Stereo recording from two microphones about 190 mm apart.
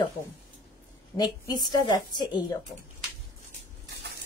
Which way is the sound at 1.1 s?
20° left (ahead or behind).